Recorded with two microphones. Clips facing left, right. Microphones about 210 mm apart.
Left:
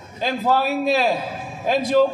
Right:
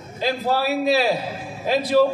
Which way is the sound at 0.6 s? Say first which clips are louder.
Even; 45° left (ahead or behind).